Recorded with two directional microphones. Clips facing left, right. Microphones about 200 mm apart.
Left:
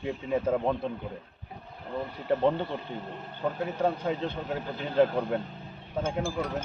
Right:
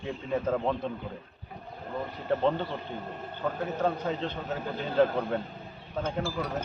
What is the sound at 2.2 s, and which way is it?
A man's voice, 15° left (ahead or behind).